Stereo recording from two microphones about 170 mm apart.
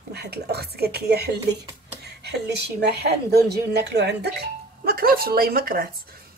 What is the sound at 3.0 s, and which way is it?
Speech, 70° right (ahead or behind).